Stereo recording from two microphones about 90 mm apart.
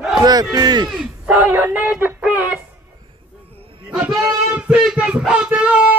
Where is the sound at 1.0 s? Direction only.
10° right (ahead or behind).